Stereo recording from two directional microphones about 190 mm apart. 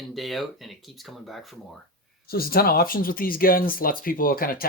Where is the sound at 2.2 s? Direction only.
55° left (ahead or behind).